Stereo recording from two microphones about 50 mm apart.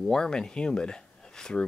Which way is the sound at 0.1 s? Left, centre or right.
Centre.